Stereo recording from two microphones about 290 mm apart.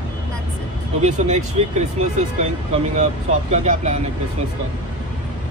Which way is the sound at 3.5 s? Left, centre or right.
Right.